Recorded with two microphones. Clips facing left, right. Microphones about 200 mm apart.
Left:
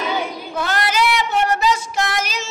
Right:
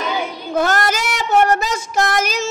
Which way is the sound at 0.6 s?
45° right (ahead or behind).